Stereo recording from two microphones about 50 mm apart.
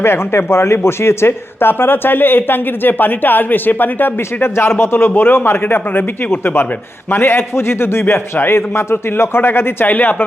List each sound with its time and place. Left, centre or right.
0.0 s speech: left
9.8 s speech: left